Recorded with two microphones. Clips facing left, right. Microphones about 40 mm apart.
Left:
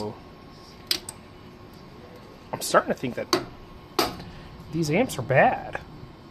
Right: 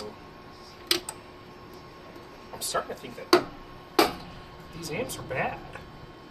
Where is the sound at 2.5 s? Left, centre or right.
Left.